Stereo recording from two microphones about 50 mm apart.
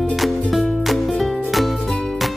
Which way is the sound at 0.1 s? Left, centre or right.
Centre.